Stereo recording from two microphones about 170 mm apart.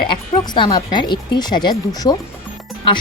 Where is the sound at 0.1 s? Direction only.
25° left (ahead or behind).